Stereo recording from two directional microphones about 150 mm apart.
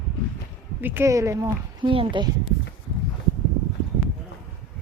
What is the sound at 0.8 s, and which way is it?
Speech, 15° right (ahead or behind).